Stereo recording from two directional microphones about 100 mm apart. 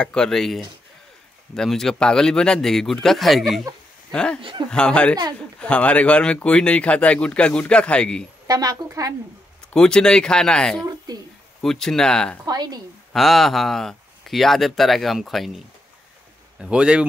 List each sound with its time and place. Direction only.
0.0 s speech: 10° left (ahead or behind)
4.4 s speech: 60° right (ahead or behind)
4.6 s speech: 10° left (ahead or behind)
8.5 s a woman's voice: 40° right (ahead or behind)
9.7 s speech: 10° left (ahead or behind)
11.1 s speech: 40° right (ahead or behind)
11.6 s speech: 5° left (ahead or behind)
12.4 s a woman's voice: 40° right (ahead or behind)
13.1 s a man's voice: centre (ahead or behind)